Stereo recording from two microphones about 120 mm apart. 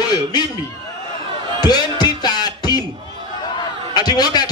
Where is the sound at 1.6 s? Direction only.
35° left (ahead or behind).